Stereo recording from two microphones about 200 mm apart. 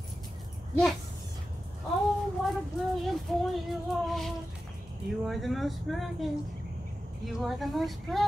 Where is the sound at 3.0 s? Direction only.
Centre (ahead or behind).